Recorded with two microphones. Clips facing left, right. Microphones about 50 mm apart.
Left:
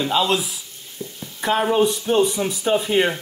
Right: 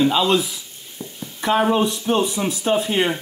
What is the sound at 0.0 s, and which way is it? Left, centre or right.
Speech, centre.